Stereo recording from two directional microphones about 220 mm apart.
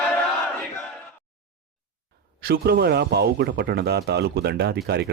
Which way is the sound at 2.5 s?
45° right (ahead or behind).